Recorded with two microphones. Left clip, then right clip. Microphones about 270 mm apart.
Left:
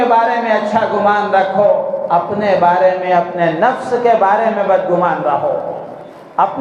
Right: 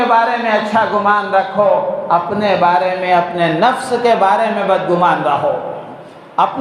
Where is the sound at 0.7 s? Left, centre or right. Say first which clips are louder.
Right 1 dB; right.